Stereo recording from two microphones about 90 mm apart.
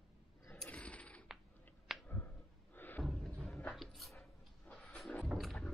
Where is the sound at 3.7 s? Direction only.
Centre (ahead or behind).